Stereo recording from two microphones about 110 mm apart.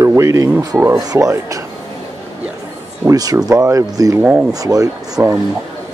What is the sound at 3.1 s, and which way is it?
Speech, 35° right (ahead or behind).